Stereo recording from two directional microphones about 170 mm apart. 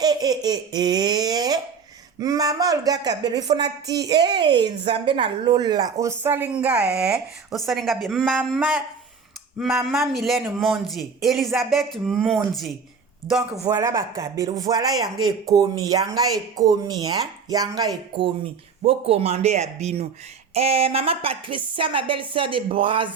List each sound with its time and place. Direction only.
0.0 s laughter: 25° right (ahead or behind)
2.1 s speech: 20° right (ahead or behind); by 12.4 s centre (ahead or behind)
13.7 s speech: 20° right (ahead or behind)
18.8 s a woman's voice: 35° right (ahead or behind)